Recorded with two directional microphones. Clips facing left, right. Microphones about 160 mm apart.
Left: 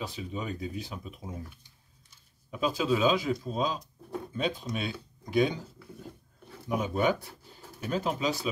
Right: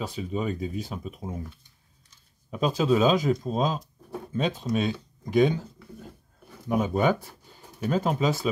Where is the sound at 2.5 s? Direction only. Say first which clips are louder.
Right 5 dB; 40° right (ahead or behind).